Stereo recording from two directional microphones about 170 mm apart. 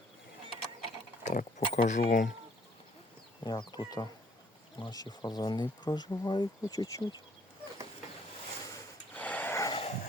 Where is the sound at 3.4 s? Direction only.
25° left (ahead or behind).